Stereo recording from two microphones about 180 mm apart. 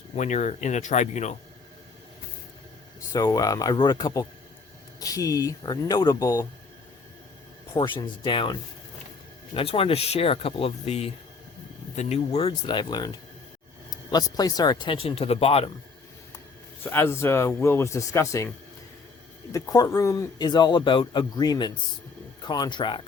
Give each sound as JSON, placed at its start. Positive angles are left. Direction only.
{"t": 0.2, "sound": "speech", "side_deg": 40}
{"t": 3.1, "sound": "speech", "side_deg": 20}
{"t": 7.7, "sound": "speech", "side_deg": 25}
{"t": 9.6, "sound": "speech", "side_deg": 30}
{"t": 16.8, "sound": "a man's voice", "side_deg": 10}